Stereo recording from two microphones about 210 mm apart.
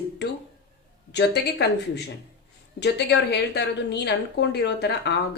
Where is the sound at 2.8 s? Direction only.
55° left (ahead or behind).